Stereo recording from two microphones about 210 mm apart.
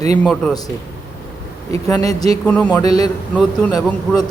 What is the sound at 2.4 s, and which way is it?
A man's voice, 5° left (ahead or behind).